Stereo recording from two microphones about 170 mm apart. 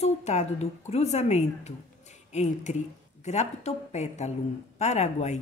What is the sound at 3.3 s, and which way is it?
A woman's voice, 40° left (ahead or behind).